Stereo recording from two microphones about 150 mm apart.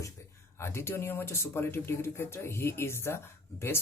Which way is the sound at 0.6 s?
15° left (ahead or behind).